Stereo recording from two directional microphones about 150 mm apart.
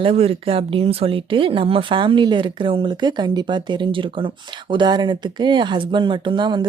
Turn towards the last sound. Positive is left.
turn(degrees=-30)  # may be behind; listen again after turning